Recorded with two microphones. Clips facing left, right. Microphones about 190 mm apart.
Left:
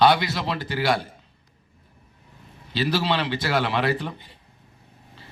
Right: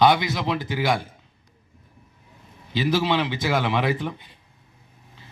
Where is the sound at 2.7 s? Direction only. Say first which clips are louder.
Right 2 dB; 15° right (ahead or behind).